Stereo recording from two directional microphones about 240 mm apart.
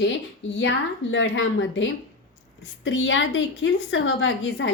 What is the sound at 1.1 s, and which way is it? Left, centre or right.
A woman's voice, left.